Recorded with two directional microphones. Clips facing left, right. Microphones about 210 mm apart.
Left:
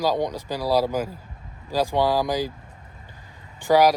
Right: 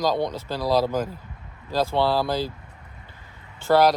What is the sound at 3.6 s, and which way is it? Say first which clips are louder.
Speech: left 1 dB; 10° left (ahead or behind).